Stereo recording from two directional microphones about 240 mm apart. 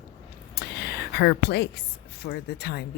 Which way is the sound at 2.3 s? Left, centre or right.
Left.